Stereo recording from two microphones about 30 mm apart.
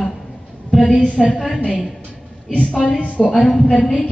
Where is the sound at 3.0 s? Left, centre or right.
Left.